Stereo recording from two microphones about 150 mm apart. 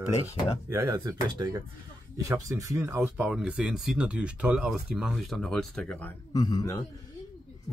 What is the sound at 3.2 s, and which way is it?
Speech, 5° right (ahead or behind).